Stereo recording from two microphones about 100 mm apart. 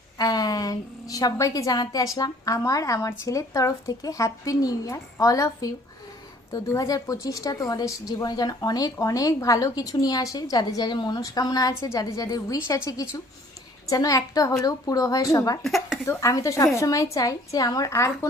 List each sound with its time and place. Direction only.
0.2 s a woman's voice: 40° left (ahead or behind)
15.6 s speech: centre (ahead or behind)
16.0 s a woman's voice: 35° left (ahead or behind)